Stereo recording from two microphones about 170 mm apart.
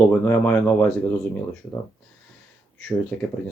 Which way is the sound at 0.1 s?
10° left (ahead or behind).